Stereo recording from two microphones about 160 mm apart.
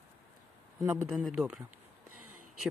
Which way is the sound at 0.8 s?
15° right (ahead or behind).